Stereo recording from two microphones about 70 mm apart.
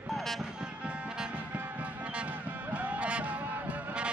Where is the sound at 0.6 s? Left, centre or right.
Centre.